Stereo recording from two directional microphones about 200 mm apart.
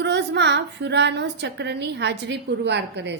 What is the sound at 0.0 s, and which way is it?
A woman's voice, 60° right (ahead or behind).